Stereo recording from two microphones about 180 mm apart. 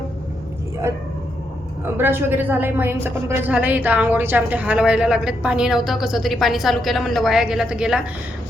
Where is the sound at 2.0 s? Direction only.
10° right (ahead or behind).